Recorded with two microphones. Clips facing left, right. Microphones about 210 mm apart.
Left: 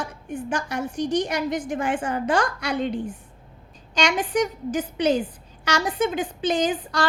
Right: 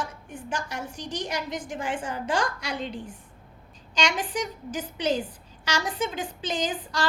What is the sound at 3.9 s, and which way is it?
A woman's voice, 60° left (ahead or behind).